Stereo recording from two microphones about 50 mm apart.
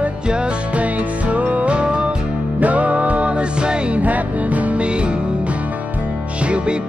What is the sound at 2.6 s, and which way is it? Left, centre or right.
Music, right.